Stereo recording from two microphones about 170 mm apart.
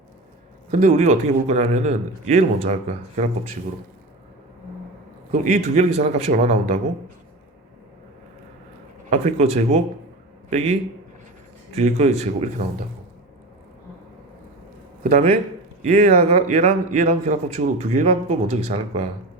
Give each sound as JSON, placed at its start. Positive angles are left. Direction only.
{"t": 0.7, "sound": "a man's voice", "side_deg": -45}
{"t": 5.3, "sound": "a man's voice", "side_deg": -50}
{"t": 5.9, "sound": "a man's voice", "side_deg": -40}
{"t": 9.0, "sound": "a man's voice", "side_deg": -40}
{"t": 11.7, "sound": "a man's voice", "side_deg": -40}
{"t": 15.0, "sound": "a man's voice", "side_deg": -50}